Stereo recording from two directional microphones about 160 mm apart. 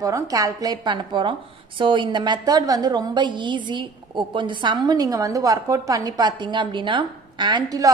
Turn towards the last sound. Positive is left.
turn(degrees=-25)  # may be behind; listen again after turning